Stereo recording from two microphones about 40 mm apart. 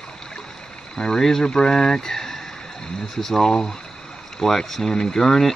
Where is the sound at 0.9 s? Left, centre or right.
Centre.